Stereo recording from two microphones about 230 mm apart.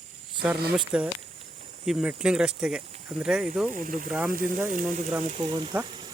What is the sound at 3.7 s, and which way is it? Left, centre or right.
Speech, right.